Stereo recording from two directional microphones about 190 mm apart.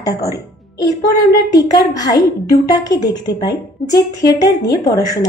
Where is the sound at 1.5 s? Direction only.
20° left (ahead or behind).